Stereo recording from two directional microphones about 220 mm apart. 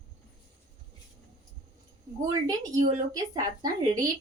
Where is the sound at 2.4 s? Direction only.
15° right (ahead or behind).